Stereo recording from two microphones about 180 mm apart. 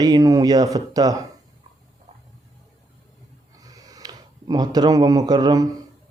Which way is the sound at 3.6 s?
20° right (ahead or behind).